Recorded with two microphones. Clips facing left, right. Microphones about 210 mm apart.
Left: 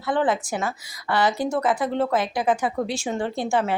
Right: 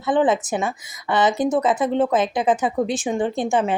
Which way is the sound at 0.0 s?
20° right (ahead or behind).